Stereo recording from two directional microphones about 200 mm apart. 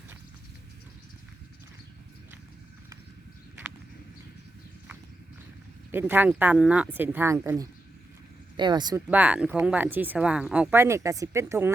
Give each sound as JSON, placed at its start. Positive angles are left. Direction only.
{"t": 5.9, "sound": "speech", "side_deg": -10}
{"t": 9.0, "sound": "speech", "side_deg": -5}